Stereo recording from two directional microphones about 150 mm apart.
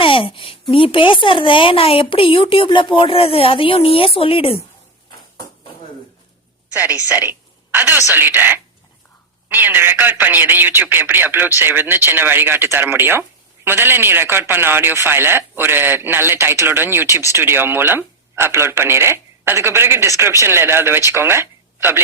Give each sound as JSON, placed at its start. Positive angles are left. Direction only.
{"t": 0.0, "sound": "a woman's voice", "side_deg": 35}
{"t": 7.1, "sound": "a woman's voice", "side_deg": -10}